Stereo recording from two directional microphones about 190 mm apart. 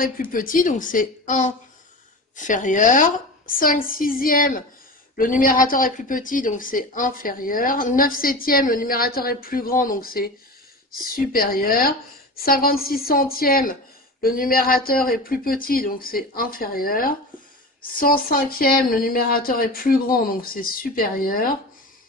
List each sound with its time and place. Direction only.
0.0 s speech: 45° left (ahead or behind)